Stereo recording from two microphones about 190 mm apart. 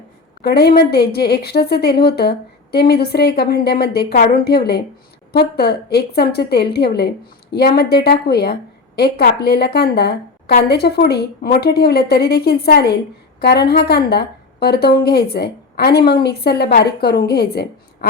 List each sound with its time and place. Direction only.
0.4 s a woman's voice: 55° left (ahead or behind)